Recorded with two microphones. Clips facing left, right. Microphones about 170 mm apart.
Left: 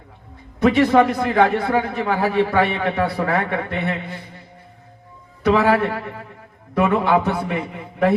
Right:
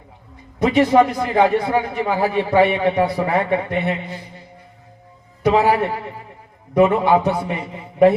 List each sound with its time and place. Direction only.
0.6 s a man's voice: 15° right (ahead or behind)
5.4 s a man's voice: 15° right (ahead or behind)